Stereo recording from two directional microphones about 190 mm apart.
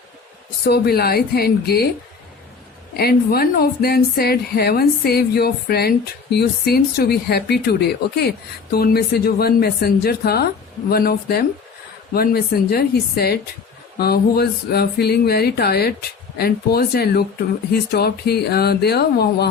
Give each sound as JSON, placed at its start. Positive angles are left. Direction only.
{"t": 0.6, "sound": "speech", "side_deg": 55}
{"t": 2.9, "sound": "speech", "side_deg": 55}